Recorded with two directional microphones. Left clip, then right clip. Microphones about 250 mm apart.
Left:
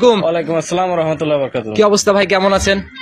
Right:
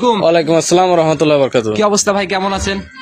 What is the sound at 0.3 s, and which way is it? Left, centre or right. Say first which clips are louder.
Speech: right 5 dB; right.